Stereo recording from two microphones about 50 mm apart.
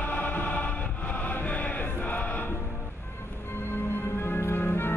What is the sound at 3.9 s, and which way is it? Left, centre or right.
Music, left.